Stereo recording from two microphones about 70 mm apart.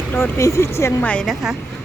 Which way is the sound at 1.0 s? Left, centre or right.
Left.